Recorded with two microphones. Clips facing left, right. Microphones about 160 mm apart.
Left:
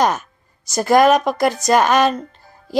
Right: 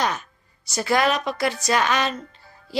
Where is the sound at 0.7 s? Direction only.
45° left (ahead or behind).